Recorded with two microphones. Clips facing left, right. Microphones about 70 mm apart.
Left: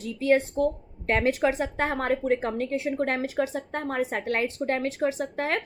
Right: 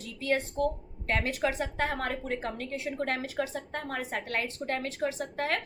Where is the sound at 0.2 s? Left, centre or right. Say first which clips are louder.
Left 6 dB; left.